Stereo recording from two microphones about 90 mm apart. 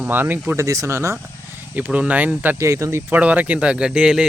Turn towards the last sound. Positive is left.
turn(degrees=-10)  # may be behind; listen again after turning